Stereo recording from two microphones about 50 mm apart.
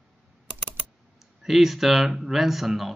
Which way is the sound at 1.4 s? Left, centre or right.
Centre.